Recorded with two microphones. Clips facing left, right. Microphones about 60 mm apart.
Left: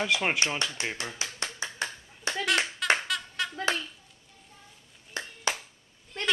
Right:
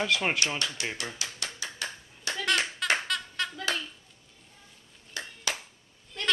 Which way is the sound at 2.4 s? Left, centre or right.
Centre.